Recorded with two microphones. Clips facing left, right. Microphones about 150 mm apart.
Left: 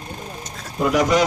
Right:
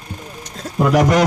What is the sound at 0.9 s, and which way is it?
Speech, 65° right (ahead or behind).